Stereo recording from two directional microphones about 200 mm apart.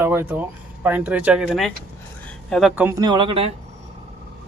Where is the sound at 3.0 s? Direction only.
25° right (ahead or behind).